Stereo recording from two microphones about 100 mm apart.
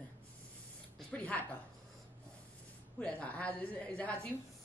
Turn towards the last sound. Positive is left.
turn(degrees=15)  # may be behind; listen again after turning